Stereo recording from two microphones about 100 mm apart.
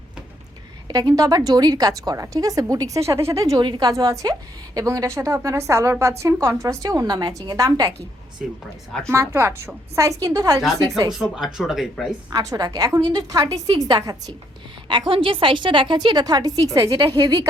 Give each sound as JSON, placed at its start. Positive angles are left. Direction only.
{"t": 0.9, "sound": "a woman's voice", "side_deg": -40}
{"t": 3.6, "sound": "a woman's voice", "side_deg": -45}
{"t": 9.0, "sound": "a woman's voice", "side_deg": -25}
{"t": 11.1, "sound": "speech", "side_deg": -5}
{"t": 12.3, "sound": "a woman's voice", "side_deg": -40}
{"t": 14.8, "sound": "a woman's voice", "side_deg": -55}